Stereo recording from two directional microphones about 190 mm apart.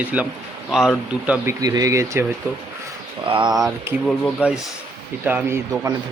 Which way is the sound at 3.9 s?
15° right (ahead or behind).